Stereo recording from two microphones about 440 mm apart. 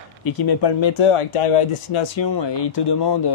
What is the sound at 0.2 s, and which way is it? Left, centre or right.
Speech, left.